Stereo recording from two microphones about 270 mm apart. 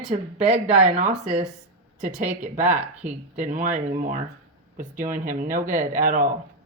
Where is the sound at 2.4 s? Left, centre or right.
Right.